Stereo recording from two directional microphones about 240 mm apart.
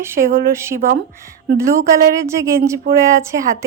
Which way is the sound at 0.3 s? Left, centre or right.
Right.